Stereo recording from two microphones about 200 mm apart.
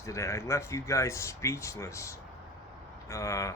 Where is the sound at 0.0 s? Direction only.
15° left (ahead or behind).